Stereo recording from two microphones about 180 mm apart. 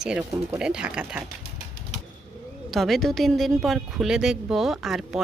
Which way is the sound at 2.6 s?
Centre (ahead or behind).